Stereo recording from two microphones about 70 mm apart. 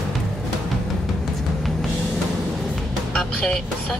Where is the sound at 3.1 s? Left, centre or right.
Centre.